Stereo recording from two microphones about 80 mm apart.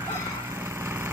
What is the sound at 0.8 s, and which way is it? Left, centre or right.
Vehicle, right.